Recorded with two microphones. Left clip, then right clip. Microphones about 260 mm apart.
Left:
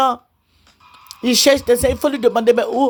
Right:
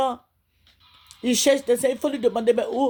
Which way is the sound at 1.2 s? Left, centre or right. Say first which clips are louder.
Left 6 dB; left.